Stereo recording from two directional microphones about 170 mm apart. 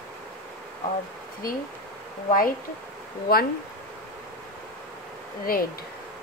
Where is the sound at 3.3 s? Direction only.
65° left (ahead or behind).